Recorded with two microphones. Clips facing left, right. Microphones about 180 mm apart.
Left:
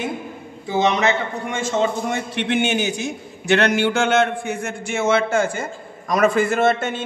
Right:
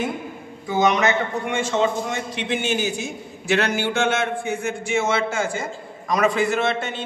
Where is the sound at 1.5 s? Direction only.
45° left (ahead or behind).